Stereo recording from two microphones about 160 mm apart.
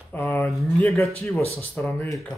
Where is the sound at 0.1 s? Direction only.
10° left (ahead or behind).